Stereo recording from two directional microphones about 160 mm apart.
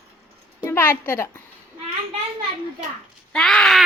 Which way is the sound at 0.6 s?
15° left (ahead or behind).